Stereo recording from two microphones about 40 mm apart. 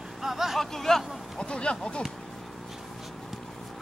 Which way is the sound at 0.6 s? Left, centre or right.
Centre.